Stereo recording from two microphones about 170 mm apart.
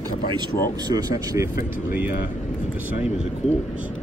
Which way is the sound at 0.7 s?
20° right (ahead or behind).